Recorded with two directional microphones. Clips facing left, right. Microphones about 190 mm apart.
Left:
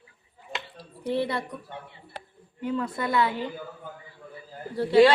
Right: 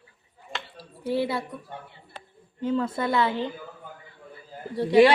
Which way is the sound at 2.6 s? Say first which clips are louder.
Right 3 dB; 25° right (ahead or behind).